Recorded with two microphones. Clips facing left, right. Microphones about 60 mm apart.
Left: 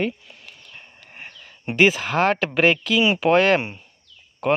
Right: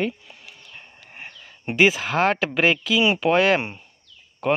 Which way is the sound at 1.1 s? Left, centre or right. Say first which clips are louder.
Even; centre.